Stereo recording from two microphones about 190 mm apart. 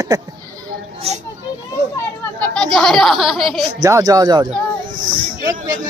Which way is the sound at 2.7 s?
Centre (ahead or behind).